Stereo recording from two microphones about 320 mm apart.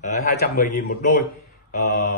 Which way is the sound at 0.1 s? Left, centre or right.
Left.